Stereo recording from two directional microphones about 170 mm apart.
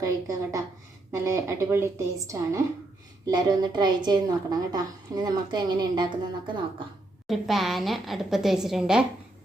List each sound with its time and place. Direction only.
0.0 s a woman's voice: 20° right (ahead or behind)
7.3 s a woman's voice: centre (ahead or behind)